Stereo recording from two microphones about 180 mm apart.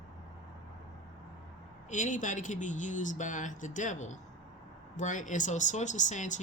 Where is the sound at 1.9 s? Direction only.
45° left (ahead or behind).